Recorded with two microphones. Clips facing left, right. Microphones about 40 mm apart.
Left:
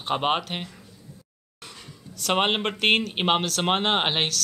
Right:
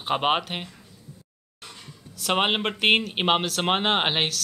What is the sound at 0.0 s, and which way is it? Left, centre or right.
Speech, centre.